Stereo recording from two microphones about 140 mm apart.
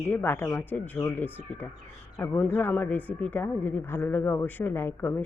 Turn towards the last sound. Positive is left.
turn(degrees=15)  # may be behind; listen again after turning